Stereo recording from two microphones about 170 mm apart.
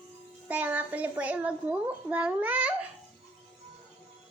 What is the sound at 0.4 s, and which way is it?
A child's voice, 10° right (ahead or behind).